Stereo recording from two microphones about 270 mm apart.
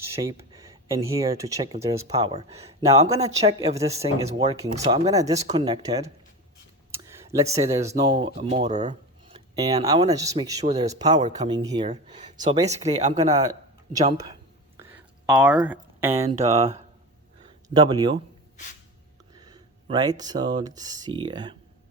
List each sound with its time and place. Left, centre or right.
0.2 s speech: centre
5.0 s speech: centre
6.9 s a sound: centre
7.9 s speech: centre
9.6 s speech: centre
14.8 s a sound: centre
16.5 s speech: right
17.4 s a sound: centre
19.3 s speech: centre